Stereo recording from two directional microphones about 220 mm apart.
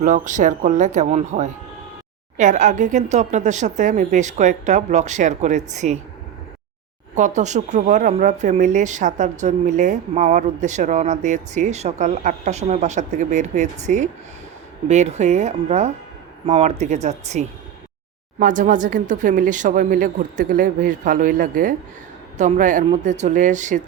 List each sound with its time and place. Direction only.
0.0 s speech: 35° right (ahead or behind)
7.2 s speech: 35° right (ahead or behind)